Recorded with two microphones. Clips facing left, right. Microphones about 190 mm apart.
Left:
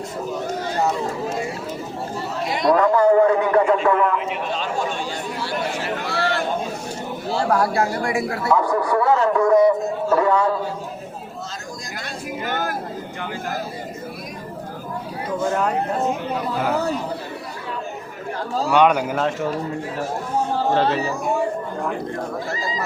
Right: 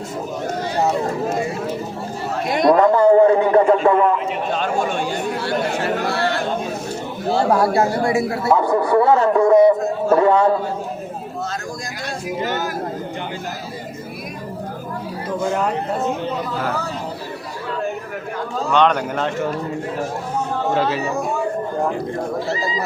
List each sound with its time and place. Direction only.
2.3 s chatter: 50° right (ahead or behind)
2.9 s a man's voice: 25° right (ahead or behind)
4.5 s chatter: 55° right (ahead or behind)
7.3 s a man's voice: 25° right (ahead or behind)
12.5 s a sound: 55° left (ahead or behind)
18.7 s speech: 10° left (ahead or behind)